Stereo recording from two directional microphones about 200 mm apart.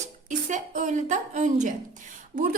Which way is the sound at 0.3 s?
40° right (ahead or behind).